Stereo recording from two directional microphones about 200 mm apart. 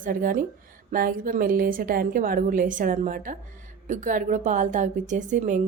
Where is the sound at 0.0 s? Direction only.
45° right (ahead or behind).